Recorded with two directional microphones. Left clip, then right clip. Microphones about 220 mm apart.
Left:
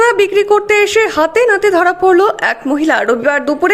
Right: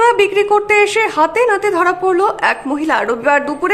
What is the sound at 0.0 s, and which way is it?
A woman's voice, 20° left (ahead or behind).